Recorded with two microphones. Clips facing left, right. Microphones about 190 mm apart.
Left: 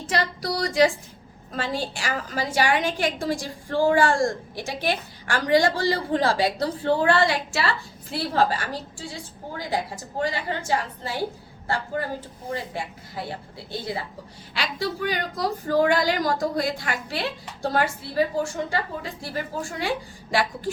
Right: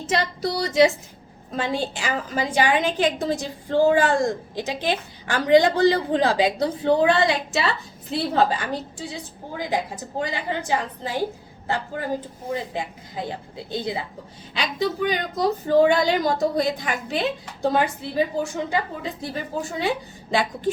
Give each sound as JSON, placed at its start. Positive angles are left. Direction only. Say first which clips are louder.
{"t": 0.0, "sound": "a woman's voice", "louder": "right 2 dB", "side_deg": -20}
{"t": 12.5, "sound": "a woman's voice", "louder": "right 3 dB", "side_deg": -20}